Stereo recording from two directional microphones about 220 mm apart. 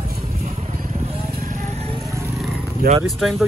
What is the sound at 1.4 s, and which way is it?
Vehicle, 35° right (ahead or behind).